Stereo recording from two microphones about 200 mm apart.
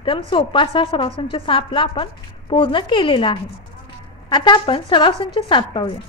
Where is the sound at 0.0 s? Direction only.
25° left (ahead or behind).